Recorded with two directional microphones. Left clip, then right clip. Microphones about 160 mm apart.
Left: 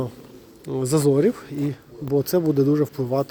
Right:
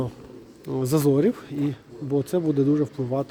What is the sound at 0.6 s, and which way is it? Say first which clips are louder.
Speech: left 2 dB; 5° right (ahead or behind).